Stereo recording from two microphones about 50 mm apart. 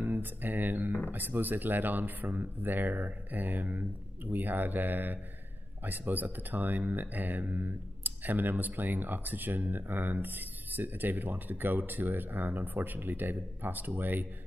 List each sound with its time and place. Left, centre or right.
0.0 s speech: right